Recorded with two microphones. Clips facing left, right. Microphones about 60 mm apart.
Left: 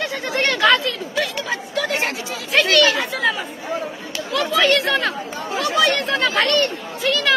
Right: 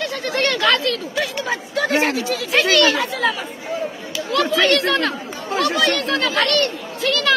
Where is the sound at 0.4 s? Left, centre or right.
Centre.